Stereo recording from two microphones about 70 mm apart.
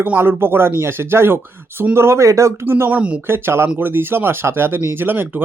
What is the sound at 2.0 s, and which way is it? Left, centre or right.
Speech, right.